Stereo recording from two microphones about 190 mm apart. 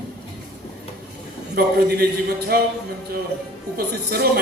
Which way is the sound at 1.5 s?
55° right (ahead or behind).